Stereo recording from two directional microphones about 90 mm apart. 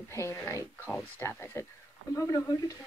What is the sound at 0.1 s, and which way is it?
Speech, 30° left (ahead or behind).